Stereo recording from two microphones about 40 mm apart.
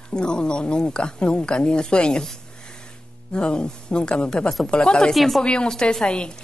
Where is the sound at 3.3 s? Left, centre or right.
Left.